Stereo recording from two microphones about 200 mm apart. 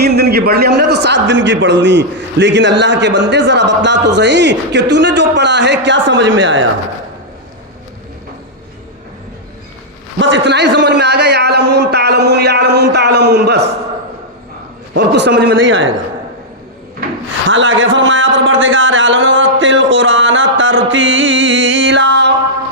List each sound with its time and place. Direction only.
0.0 s a man's voice: 55° right (ahead or behind)
10.2 s a man's voice: 65° right (ahead or behind)
14.9 s a man's voice: 55° right (ahead or behind)
17.5 s speech: 70° right (ahead or behind)